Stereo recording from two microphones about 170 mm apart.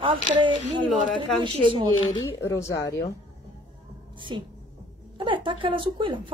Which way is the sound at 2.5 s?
20° left (ahead or behind).